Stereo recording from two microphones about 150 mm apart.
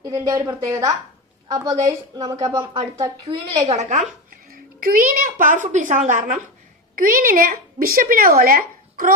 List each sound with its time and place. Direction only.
0.0 s a woman's voice: 20° right (ahead or behind)
3.2 s a woman's voice: 45° right (ahead or behind)
4.3 s a woman's voice: 75° right (ahead or behind)